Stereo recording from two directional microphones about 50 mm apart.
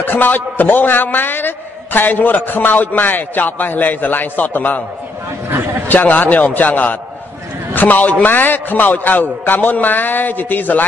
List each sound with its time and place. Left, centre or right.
0.0 s a man's voice: left
5.9 s a man's voice: left